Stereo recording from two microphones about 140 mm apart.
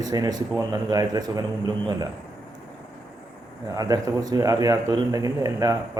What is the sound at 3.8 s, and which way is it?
A man's voice, 25° right (ahead or behind).